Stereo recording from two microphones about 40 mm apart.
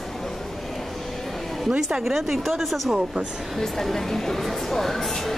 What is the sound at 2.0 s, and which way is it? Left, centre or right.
Speech, centre.